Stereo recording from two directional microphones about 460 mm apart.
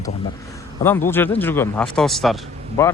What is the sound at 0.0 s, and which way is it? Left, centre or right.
A man's voice, centre.